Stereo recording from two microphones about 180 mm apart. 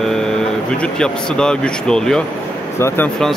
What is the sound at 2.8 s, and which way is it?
Speech, 15° left (ahead or behind).